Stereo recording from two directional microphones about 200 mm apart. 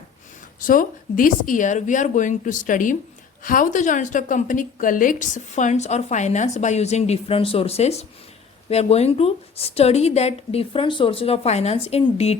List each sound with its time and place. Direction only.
0.7 s a woman's voice: 45° left (ahead or behind)